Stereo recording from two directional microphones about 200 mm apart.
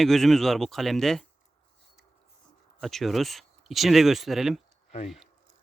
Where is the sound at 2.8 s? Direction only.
Centre (ahead or behind).